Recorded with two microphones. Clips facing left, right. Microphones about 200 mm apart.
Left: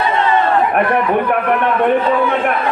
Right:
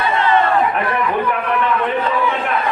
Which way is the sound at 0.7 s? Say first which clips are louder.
Left 5 dB; 55° left (ahead or behind).